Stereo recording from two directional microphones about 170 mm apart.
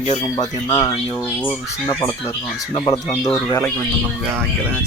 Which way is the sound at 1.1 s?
10° left (ahead or behind).